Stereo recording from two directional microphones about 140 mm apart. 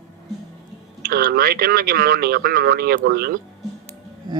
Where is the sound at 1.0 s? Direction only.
90° right.